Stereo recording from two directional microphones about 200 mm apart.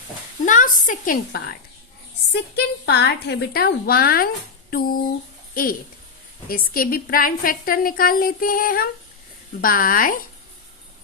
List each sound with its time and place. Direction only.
0.4 s a woman's voice: 40° left (ahead or behind)
2.3 s a woman's voice: 55° left (ahead or behind)
6.5 s a woman's voice: 45° left (ahead or behind)